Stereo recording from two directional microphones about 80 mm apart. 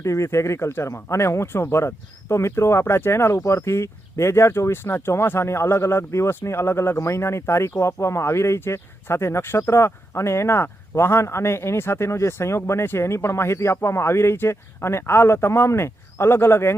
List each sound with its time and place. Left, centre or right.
0.0 s speech: left